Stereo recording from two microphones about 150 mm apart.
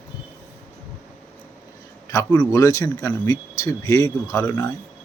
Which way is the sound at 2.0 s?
20° left (ahead or behind).